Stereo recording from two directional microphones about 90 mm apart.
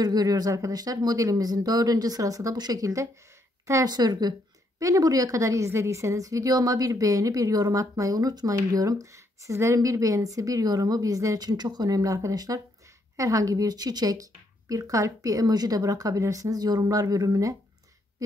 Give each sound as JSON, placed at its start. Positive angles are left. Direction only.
{"t": 0.0, "sound": "speech", "side_deg": -45}
{"t": 3.9, "sound": "speech", "side_deg": -50}